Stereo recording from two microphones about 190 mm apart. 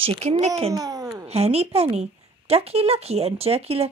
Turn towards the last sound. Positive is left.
turn(degrees=-30)  # may be behind; listen again after turning